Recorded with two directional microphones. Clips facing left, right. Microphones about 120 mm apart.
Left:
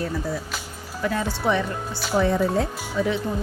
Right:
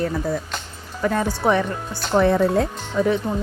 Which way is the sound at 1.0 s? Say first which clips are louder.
Right 4 dB; 50° right (ahead or behind).